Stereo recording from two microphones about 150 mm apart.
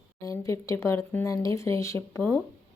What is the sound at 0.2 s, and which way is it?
Speech, 20° left (ahead or behind).